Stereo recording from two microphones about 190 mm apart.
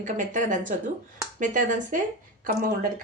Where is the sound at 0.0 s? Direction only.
40° right (ahead or behind).